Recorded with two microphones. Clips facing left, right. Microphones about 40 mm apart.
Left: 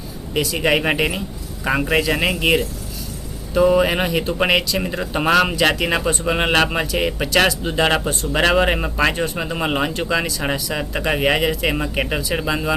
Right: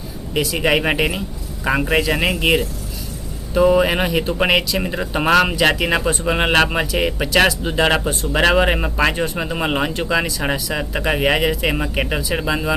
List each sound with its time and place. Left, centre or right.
0.3 s speech: centre